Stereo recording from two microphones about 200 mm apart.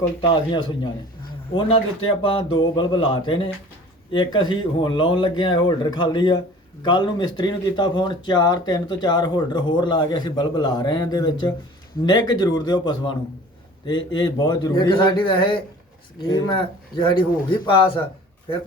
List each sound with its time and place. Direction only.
0.2 s speech: 25° left (ahead or behind)
2.0 s speech: 25° left (ahead or behind)